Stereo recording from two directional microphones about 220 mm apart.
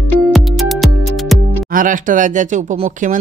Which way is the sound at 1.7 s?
35° right (ahead or behind).